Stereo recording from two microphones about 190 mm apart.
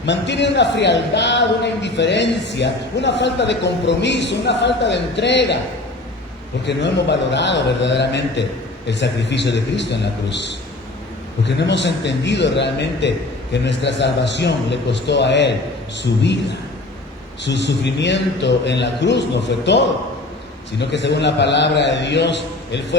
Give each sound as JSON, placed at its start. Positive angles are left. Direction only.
{"t": 0.0, "sound": "a man's voice", "side_deg": 65}
{"t": 6.7, "sound": "a man's voice", "side_deg": 65}